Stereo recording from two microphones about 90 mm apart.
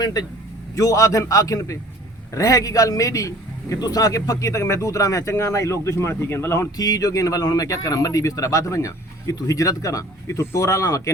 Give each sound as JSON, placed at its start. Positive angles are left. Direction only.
{"t": 0.0, "sound": "a man's voice", "side_deg": 50}
{"t": 0.8, "sound": "speech", "side_deg": 40}
{"t": 6.7, "sound": "speech", "side_deg": 45}